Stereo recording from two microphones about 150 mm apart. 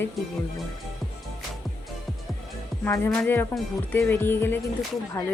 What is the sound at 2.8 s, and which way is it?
Speech, 10° left (ahead or behind).